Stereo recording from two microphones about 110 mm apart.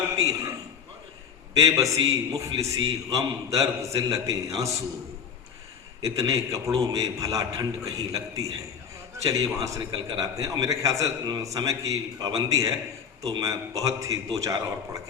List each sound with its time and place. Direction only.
1.7 s a man's voice: 30° right (ahead or behind)
6.1 s a man's voice: 30° right (ahead or behind)